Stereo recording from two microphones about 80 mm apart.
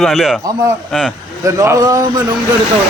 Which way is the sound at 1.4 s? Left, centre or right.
Right.